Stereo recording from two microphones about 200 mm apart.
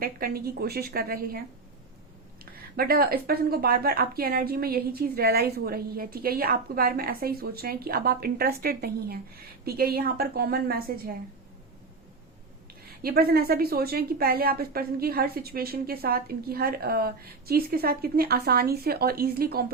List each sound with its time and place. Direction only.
0.0 s speech: 50° right (ahead or behind)
2.4 s speech: 50° right (ahead or behind)
13.0 s speech: 50° right (ahead or behind)